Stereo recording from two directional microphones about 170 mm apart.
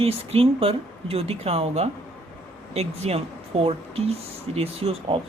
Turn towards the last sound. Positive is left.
turn(degrees=-35)  # may be behind; listen again after turning